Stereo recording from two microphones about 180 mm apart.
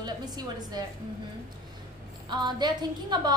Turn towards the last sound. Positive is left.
turn(degrees=-25)  # may be behind; listen again after turning